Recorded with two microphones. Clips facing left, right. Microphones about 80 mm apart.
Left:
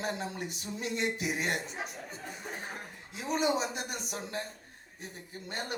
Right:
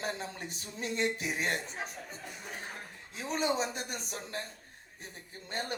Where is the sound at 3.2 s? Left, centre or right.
Right.